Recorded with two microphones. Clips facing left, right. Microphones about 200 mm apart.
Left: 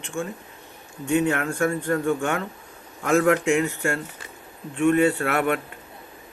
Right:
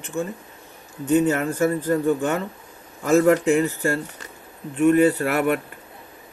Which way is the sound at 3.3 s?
35° right (ahead or behind).